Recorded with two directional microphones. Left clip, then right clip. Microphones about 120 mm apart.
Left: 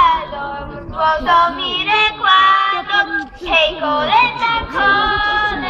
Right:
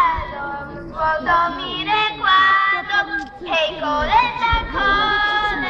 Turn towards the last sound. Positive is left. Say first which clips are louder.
# left 2 dB
turn(degrees=35)  # may be behind; listen again after turning